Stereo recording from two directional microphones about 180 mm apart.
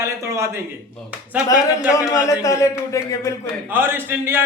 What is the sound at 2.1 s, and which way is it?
Speech, 20° left (ahead or behind).